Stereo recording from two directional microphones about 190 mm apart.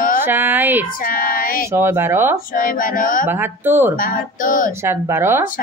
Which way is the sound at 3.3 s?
10° right (ahead or behind).